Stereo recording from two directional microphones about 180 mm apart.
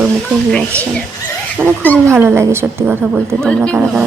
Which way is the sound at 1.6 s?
5° right (ahead or behind).